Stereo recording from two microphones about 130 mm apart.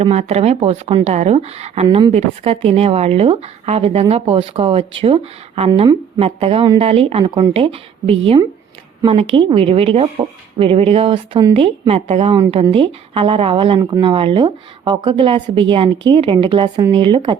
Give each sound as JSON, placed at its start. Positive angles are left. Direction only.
{"t": 0.0, "sound": "speech", "side_deg": -55}
{"t": 12.3, "sound": "speech", "side_deg": -40}